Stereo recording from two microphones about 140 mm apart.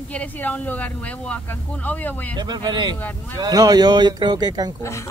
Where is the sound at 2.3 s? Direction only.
30° right (ahead or behind).